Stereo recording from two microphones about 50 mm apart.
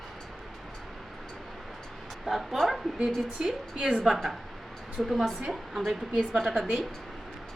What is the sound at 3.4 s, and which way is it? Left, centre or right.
Speech, right.